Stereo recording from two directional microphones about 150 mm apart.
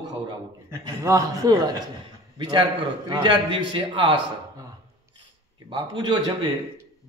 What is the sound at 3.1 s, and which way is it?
A man's voice, 35° right (ahead or behind).